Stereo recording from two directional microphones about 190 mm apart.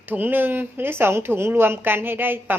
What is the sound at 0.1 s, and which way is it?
A woman's voice, 10° right (ahead or behind).